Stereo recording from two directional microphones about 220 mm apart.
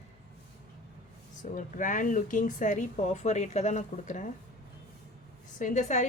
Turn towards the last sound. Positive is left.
turn(degrees=30)  # may be behind; listen again after turning